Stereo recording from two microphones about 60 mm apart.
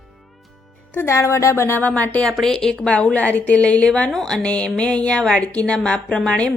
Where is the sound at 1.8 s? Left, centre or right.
Left.